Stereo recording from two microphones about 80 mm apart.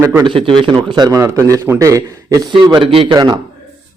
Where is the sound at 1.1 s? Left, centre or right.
Right.